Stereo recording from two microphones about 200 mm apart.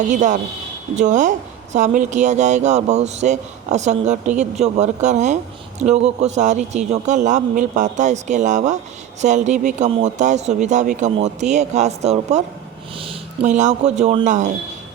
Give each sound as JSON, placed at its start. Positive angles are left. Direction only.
{"t": 0.1, "sound": "speech", "side_deg": -40}